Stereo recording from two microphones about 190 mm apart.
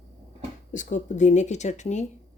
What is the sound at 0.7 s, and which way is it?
Speech, 40° left (ahead or behind).